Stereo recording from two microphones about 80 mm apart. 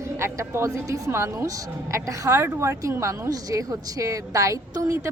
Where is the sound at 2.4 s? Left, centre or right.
Right.